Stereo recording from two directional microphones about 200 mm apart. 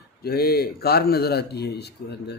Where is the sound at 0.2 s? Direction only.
50° left (ahead or behind).